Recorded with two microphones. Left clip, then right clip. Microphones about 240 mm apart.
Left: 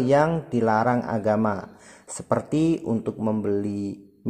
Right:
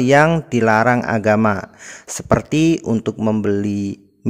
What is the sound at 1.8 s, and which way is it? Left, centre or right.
Speech, right.